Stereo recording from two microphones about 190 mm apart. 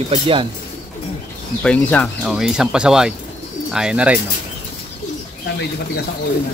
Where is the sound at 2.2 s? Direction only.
5° right (ahead or behind).